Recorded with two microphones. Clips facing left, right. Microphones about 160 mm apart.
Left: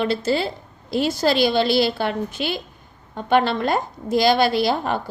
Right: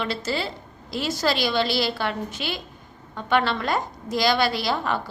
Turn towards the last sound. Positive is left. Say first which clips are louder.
# left 5 dB
turn(degrees=50)  # may be behind; listen again after turning